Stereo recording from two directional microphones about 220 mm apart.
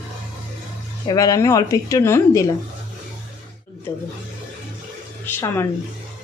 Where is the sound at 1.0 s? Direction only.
15° left (ahead or behind).